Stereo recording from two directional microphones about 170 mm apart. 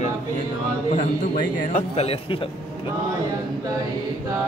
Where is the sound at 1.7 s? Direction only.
35° left (ahead or behind).